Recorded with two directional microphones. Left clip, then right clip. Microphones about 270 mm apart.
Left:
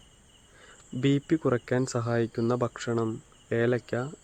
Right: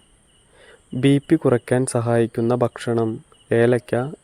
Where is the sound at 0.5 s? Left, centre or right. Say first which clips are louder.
Right 8 dB; right.